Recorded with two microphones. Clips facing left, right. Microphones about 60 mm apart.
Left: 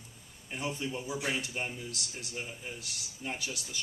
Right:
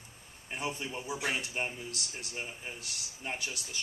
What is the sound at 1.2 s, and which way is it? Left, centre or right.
Speech, right.